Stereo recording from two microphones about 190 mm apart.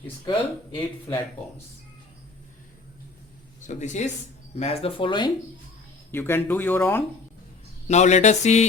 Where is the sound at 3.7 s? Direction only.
40° left (ahead or behind).